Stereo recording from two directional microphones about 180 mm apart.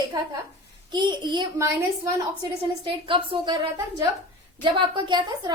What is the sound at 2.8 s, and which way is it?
Speech, 30° right (ahead or behind).